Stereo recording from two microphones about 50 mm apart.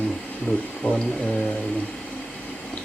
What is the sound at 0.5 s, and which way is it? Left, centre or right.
Music, left.